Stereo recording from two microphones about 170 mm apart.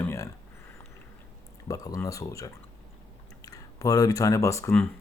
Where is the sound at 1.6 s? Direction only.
20° left (ahead or behind).